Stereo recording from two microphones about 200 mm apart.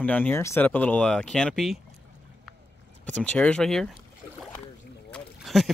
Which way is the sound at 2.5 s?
Centre (ahead or behind).